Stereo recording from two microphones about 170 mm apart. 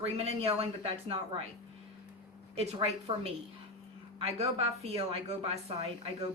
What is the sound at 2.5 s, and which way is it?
A woman's voice, 35° right (ahead or behind).